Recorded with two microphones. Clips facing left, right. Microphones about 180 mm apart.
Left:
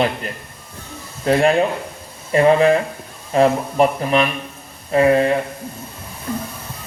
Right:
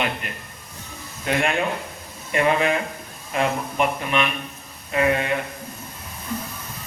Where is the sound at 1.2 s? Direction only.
35° left (ahead or behind).